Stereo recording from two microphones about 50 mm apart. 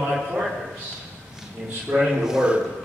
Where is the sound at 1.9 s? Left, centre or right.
Centre.